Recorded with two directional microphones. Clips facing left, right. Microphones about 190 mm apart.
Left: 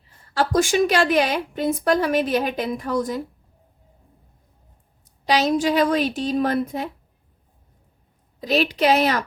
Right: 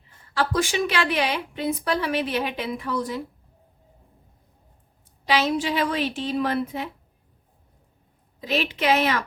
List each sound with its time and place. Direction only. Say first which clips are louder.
0.3 s a woman's voice: left 5 dB; 45° left (ahead or behind)
5.2 s a woman's voice: left 3 dB; 40° left (ahead or behind)
8.4 s a woman's voice: left 5 dB; 40° left (ahead or behind)